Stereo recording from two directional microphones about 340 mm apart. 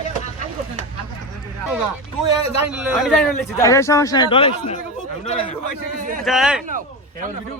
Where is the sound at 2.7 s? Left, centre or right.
Centre.